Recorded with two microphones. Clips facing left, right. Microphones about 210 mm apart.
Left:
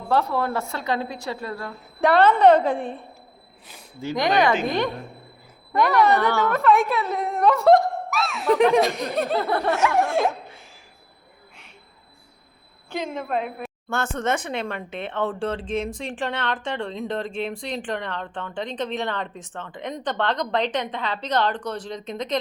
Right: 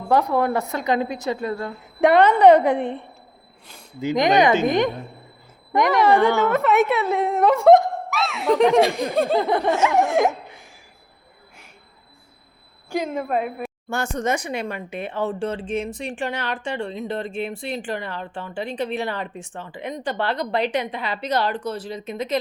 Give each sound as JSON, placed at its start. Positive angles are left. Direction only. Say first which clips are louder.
{"t": 0.1, "sound": "a woman's voice", "louder": "right 3 dB", "side_deg": -15}
{"t": 4.0, "sound": "a woman's voice", "louder": "right 3 dB", "side_deg": -20}
{"t": 8.2, "sound": "laughter", "louder": "right 3 dB", "side_deg": -25}
{"t": 9.0, "sound": "a woman's voice", "louder": "right 4 dB", "side_deg": -25}
{"t": 12.9, "sound": "a woman's voice", "louder": "right 3 dB", "side_deg": -10}